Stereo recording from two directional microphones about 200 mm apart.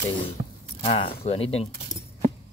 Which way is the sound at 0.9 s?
25° left (ahead or behind).